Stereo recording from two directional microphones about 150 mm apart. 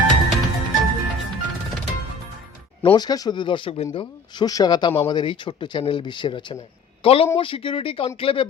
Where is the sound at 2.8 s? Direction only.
30° left (ahead or behind).